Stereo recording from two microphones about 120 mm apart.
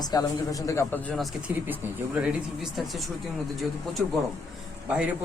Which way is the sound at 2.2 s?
5° right (ahead or behind).